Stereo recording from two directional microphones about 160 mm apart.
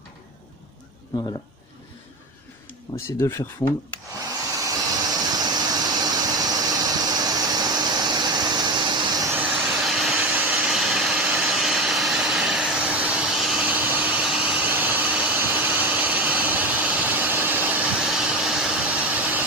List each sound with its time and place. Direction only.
1.1 s speech: 25° left (ahead or behind)
3.1 s speech: 20° left (ahead or behind)
4.6 s vehicle: 20° right (ahead or behind)
9.3 s vehicle: 5° right (ahead or behind)